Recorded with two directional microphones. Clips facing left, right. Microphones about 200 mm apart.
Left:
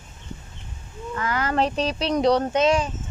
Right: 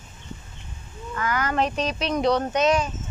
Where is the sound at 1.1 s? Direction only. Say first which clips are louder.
Left 1 dB; 25° left (ahead or behind).